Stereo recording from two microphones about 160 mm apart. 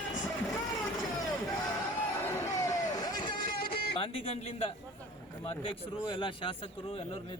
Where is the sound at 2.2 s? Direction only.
20° left (ahead or behind).